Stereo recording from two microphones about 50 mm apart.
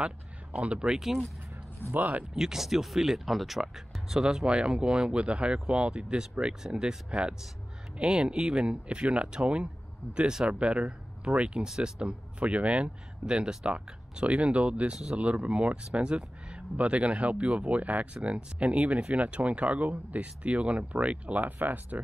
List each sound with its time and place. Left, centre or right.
0.0 s speech: right
1.9 s speech: right
2.3 s speech: centre; by 22.0 s right